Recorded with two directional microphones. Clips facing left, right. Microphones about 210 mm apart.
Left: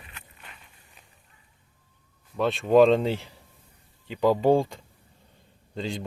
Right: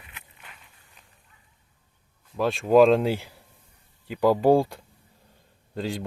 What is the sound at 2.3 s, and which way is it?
Speech, centre (ahead or behind).